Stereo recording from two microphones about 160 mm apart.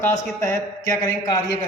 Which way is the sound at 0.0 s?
20° left (ahead or behind).